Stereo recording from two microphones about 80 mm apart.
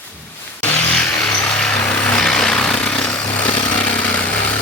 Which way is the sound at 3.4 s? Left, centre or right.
Left.